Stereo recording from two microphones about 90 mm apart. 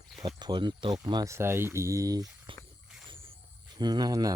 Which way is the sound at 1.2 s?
30° right (ahead or behind).